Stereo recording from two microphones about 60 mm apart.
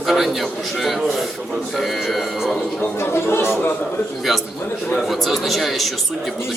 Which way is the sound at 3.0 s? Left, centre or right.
Left.